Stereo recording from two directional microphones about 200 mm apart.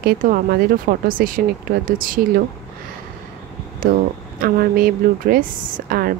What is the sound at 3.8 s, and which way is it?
Speech, 45° right (ahead or behind).